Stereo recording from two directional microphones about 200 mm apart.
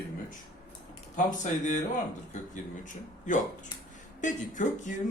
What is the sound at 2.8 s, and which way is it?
Speech, 40° left (ahead or behind).